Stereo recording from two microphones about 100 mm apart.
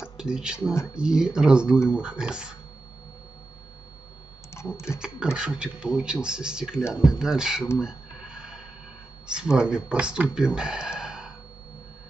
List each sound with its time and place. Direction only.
0.0 s speech: 10° right (ahead or behind)
4.5 s typing: 25° left (ahead or behind)
4.9 s speech: 10° right (ahead or behind)
7.8 s a sound: 5° right (ahead or behind)
9.3 s speech: 10° right (ahead or behind)